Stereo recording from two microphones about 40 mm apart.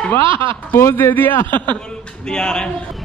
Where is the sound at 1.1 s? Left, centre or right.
Left.